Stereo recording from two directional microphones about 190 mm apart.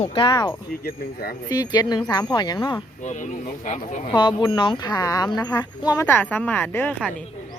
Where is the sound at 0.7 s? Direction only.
50° left (ahead or behind).